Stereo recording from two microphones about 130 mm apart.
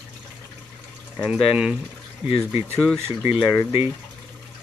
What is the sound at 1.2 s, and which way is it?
Speech, 10° right (ahead or behind).